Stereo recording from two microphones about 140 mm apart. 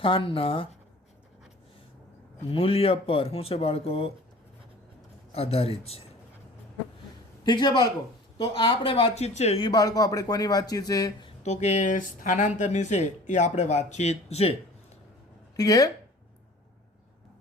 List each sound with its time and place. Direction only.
0.0 s a woman's voice: 40° left (ahead or behind)
2.5 s speech: 40° left (ahead or behind)
5.3 s speech: 45° left (ahead or behind)
7.4 s a woman's voice: 35° left (ahead or behind); by 9.6 s 50° left (ahead or behind)
9.6 s speech: 30° left (ahead or behind)
11.4 s speech: 55° left (ahead or behind)
15.5 s speech: 25° left (ahead or behind)